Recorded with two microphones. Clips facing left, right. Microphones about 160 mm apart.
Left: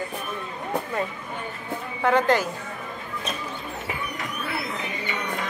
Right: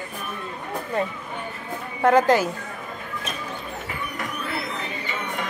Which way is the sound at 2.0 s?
Centre (ahead or behind).